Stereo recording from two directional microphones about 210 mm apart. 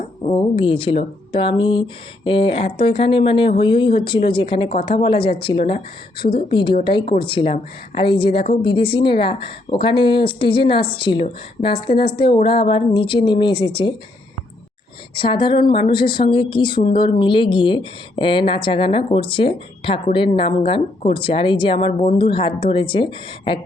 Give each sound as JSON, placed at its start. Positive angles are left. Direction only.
{"t": 0.0, "sound": "speech", "side_deg": 25}
{"t": 15.1, "sound": "speech", "side_deg": 25}